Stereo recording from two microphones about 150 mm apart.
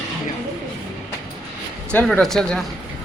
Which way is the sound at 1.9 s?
5° left (ahead or behind).